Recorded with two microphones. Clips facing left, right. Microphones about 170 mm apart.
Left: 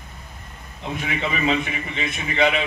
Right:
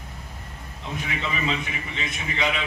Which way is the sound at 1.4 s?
60° left (ahead or behind).